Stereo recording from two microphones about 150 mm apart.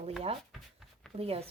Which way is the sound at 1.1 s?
40° right (ahead or behind).